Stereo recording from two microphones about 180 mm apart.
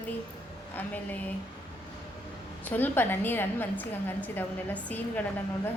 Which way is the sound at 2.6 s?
10° left (ahead or behind).